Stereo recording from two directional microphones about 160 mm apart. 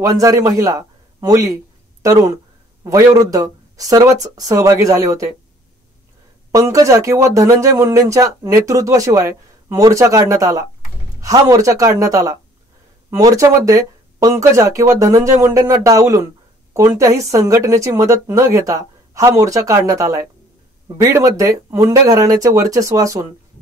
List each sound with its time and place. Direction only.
0.0 s a man's voice: 20° right (ahead or behind)
6.5 s speech: 20° right (ahead or behind)